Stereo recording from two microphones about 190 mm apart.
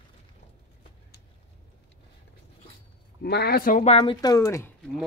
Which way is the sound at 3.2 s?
55° left (ahead or behind).